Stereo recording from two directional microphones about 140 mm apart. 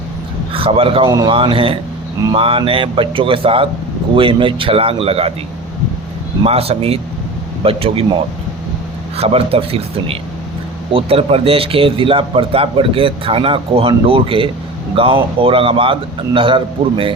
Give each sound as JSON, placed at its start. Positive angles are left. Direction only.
{"t": 0.5, "sound": "a man's voice", "side_deg": -40}
{"t": 6.4, "sound": "speech", "side_deg": -45}
{"t": 9.1, "sound": "speech", "side_deg": -45}